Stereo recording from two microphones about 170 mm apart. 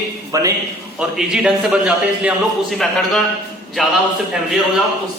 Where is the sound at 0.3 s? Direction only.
20° right (ahead or behind).